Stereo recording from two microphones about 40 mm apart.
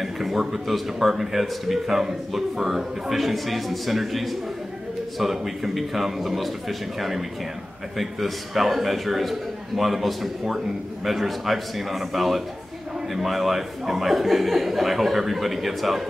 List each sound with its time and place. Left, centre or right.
0.0 s speech: centre